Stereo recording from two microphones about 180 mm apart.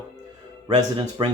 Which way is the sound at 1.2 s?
25° right (ahead or behind).